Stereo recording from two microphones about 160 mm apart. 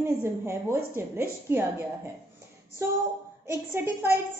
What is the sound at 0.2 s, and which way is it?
A woman's voice, 15° right (ahead or behind).